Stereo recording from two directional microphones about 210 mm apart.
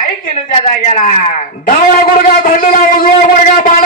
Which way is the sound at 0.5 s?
30° left (ahead or behind).